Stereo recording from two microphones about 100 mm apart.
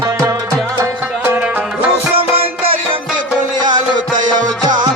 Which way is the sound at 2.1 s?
75° right (ahead or behind).